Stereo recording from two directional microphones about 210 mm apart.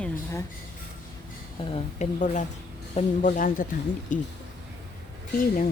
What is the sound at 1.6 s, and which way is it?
Speech, 30° left (ahead or behind).